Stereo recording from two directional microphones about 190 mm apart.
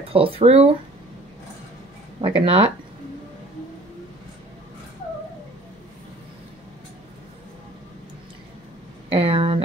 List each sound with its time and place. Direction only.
0.1 s speech: 30° right (ahead or behind)
2.2 s speech: 25° right (ahead or behind)
9.1 s a sound: 30° right (ahead or behind)